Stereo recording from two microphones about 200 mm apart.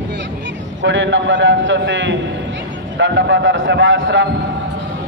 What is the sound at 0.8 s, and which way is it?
A man's voice, 65° right (ahead or behind).